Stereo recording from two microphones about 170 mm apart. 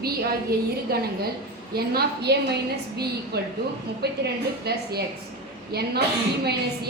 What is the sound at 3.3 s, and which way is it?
A woman's voice, 70° right (ahead or behind).